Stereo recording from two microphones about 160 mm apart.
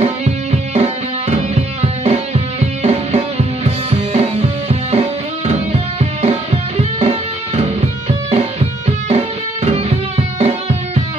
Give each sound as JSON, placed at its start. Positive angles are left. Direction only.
{"t": 0.0, "sound": "music", "side_deg": -40}